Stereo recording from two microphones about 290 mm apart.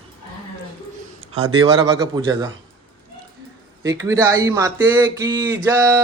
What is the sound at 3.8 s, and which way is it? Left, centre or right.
Speech, centre.